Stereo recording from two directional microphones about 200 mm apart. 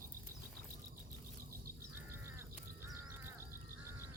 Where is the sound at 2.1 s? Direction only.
10° right (ahead or behind).